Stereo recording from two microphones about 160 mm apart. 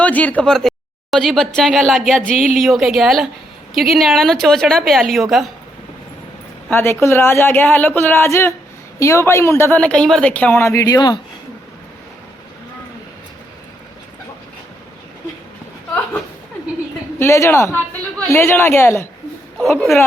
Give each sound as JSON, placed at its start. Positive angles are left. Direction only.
{"t": 0.0, "sound": "a woman's voice", "side_deg": 10}
{"t": 6.7, "sound": "speech", "side_deg": 15}
{"t": 17.2, "sound": "speech", "side_deg": 15}